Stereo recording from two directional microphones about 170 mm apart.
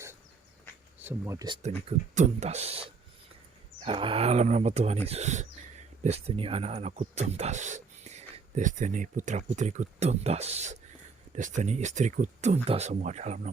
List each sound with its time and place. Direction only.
1.0 s speech: 15° right (ahead or behind)
2.1 s speech: 45° right (ahead or behind)